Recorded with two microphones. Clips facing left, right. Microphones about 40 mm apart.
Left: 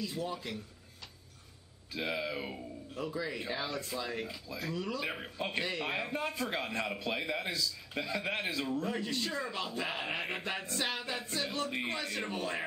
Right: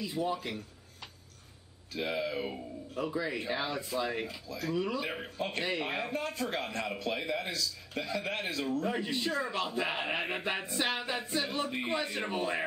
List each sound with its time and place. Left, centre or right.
0.0 s speech: centre
1.9 s speech: centre
2.9 s speech: centre
4.5 s a man's voice: centre
4.7 s speech: centre
5.0 s speech: centre
5.6 s speech: centre
6.1 s a man's voice: centre
8.8 s speech: centre